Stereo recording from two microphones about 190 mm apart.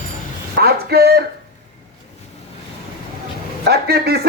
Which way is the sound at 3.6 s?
55° right (ahead or behind).